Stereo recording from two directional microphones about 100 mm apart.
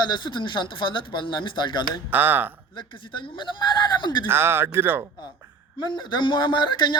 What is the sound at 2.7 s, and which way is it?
Speech, 50° left (ahead or behind).